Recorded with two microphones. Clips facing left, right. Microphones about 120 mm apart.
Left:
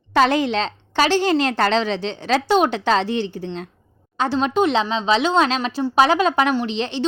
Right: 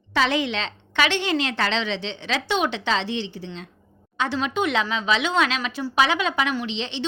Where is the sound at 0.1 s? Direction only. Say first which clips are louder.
Left 5 dB; 45° left (ahead or behind).